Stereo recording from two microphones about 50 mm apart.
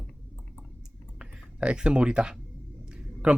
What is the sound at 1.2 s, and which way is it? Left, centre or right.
Speech, centre.